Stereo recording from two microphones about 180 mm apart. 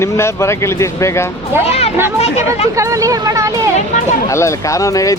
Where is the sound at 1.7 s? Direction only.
35° left (ahead or behind).